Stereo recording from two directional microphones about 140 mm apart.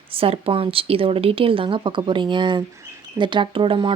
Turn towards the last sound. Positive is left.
turn(degrees=-40)  # may be behind; listen again after turning